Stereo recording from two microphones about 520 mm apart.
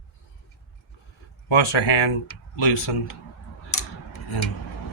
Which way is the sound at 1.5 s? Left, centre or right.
Left.